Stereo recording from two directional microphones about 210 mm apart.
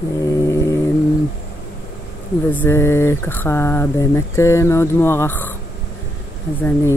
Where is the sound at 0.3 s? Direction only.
15° left (ahead or behind).